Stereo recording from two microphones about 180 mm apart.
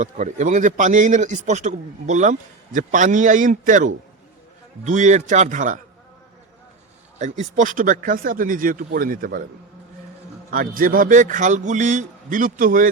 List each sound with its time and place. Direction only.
0.0 s a man's voice: 45° right (ahead or behind)
7.2 s a man's voice: 40° right (ahead or behind)
10.5 s a man's voice: 50° right (ahead or behind)